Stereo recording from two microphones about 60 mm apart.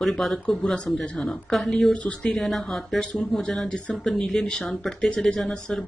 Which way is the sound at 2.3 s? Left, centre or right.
Centre.